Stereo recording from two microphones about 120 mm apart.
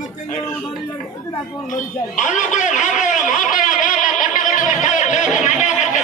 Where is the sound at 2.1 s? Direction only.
90° left.